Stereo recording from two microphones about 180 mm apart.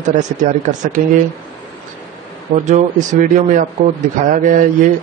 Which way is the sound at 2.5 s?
40° right (ahead or behind).